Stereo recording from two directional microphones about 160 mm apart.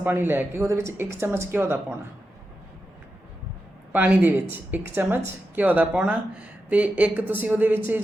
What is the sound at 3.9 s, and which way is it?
A woman's voice, 10° right (ahead or behind).